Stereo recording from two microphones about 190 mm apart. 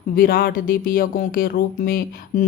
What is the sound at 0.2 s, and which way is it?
A woman's voice, 50° left (ahead or behind).